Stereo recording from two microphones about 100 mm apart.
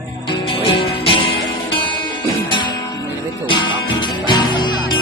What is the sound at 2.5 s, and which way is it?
Music, 50° left (ahead or behind).